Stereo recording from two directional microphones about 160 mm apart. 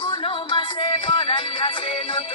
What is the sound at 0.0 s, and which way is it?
Music, 35° left (ahead or behind).